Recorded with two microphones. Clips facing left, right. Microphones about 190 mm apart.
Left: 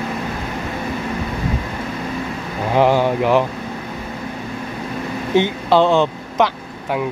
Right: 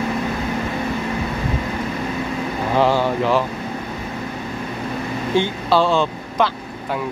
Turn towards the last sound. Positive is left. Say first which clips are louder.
# left 2 dB
turn(degrees=20)  # may be behind; listen again after turning